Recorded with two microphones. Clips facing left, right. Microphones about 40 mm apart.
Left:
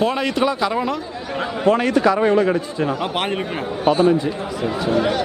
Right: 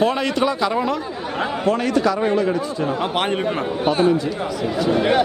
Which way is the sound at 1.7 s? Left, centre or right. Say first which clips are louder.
Left 4 dB; left.